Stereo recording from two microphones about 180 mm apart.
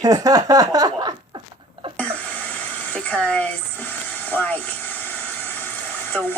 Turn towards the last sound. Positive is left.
turn(degrees=10)  # may be behind; listen again after turning